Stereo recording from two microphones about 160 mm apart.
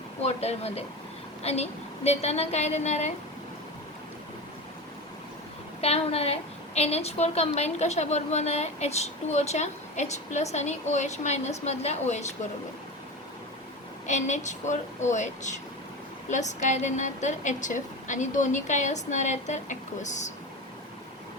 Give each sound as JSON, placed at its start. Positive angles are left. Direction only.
{"t": 0.2, "sound": "a woman's voice", "side_deg": 40}
{"t": 5.8, "sound": "a woman's voice", "side_deg": 40}
{"t": 14.1, "sound": "a woman's voice", "side_deg": 45}